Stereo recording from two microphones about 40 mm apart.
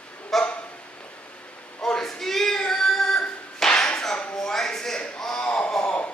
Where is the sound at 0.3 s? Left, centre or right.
Centre.